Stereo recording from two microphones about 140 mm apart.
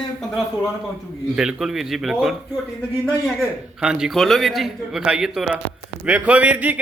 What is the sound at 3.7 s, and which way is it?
Speech, 5° right (ahead or behind).